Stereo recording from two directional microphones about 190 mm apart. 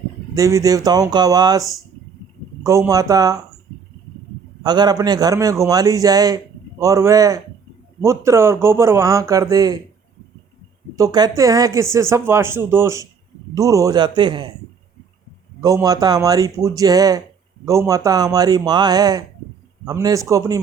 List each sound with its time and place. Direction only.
0.3 s a man's voice: 15° right (ahead or behind)
2.6 s speech: 15° right (ahead or behind)
4.6 s a man's voice: 20° right (ahead or behind)
10.9 s a man's voice: 20° right (ahead or behind)
15.6 s a man's voice: 20° right (ahead or behind)